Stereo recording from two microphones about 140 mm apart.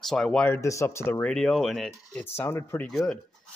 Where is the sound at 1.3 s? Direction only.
5° left (ahead or behind).